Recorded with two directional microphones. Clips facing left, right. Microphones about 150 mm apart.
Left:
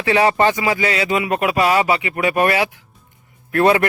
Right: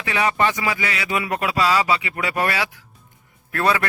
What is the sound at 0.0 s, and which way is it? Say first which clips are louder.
A man's voice: left 6 dB; 30° left (ahead or behind).